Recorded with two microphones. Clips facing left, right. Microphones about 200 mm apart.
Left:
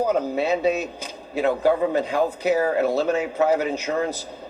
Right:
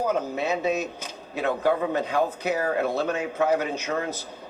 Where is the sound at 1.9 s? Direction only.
35° left (ahead or behind).